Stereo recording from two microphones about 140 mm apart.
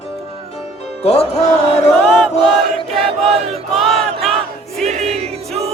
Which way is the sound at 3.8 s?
Centre (ahead or behind).